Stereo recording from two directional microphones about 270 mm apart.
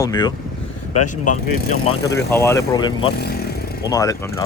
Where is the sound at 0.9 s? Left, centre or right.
Left.